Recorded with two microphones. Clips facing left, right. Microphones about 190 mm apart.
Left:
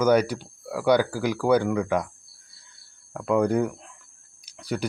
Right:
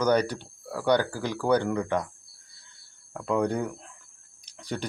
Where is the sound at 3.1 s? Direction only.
5° left (ahead or behind).